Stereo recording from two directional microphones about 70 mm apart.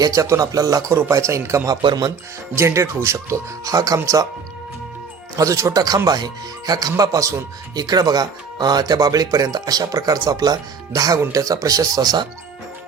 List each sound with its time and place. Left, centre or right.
0.0 s speech: right
1.6 s speech: right
2.6 s speech: right
5.4 s speech: right
6.1 s speech: right
7.8 s speech: right